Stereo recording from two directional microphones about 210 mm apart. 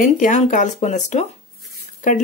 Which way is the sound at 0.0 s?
35° left (ahead or behind).